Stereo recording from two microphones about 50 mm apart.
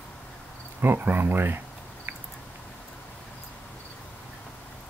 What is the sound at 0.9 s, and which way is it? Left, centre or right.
Speech, right.